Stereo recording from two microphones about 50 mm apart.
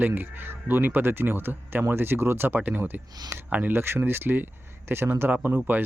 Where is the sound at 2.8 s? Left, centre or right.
Right.